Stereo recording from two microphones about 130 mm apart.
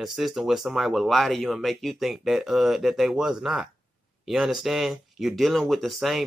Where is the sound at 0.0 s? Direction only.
Centre (ahead or behind).